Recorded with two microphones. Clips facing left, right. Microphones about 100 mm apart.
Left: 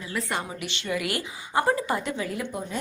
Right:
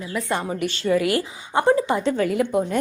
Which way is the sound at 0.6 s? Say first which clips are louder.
Right 9 dB; 40° right (ahead or behind).